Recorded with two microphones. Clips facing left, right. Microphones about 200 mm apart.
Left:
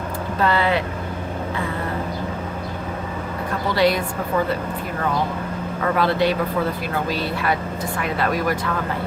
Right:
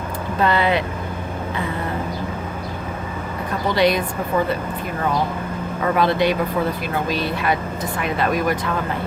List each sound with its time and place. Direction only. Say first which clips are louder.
0.4 s speech: right 1 dB; 20° right (ahead or behind)
3.8 s speech: right 1 dB; 20° right (ahead or behind)
6.0 s speech: right 1 dB; 15° right (ahead or behind)